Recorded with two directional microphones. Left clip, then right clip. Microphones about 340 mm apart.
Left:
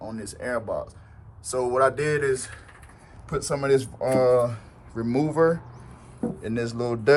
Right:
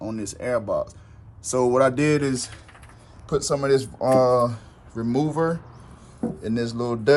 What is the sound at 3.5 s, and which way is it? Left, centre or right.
Speech, centre.